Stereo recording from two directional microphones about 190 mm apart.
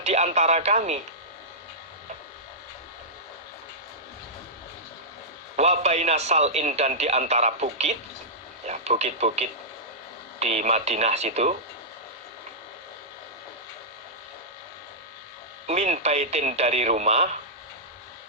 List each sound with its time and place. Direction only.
0.0 s speech: 35° right (ahead or behind)
5.5 s a man's voice: 35° right (ahead or behind)
15.6 s a man's voice: 35° right (ahead or behind)